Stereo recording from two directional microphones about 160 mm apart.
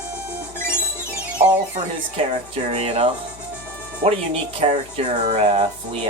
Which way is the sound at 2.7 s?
40° right (ahead or behind).